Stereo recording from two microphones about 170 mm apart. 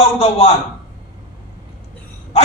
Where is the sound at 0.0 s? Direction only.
35° left (ahead or behind).